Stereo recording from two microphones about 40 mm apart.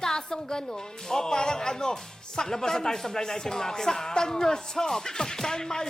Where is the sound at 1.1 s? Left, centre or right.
Centre.